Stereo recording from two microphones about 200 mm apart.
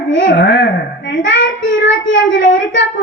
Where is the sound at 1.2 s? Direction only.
65° left (ahead or behind).